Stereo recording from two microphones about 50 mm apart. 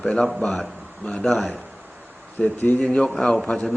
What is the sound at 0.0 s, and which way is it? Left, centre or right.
A man's voice, centre.